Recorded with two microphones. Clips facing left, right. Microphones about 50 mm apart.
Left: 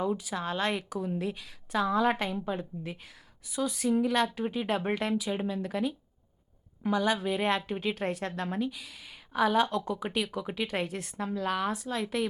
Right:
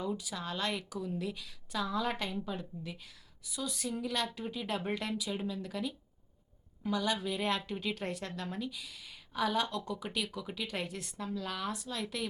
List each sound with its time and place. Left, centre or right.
0.0 s a woman's voice: left